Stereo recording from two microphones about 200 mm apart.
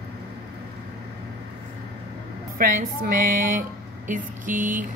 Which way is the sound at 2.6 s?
45° right (ahead or behind).